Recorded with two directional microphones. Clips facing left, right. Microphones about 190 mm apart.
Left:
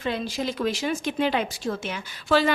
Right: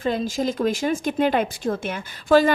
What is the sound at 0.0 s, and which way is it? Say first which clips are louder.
Speech: right 5 dB; 45° right (ahead or behind).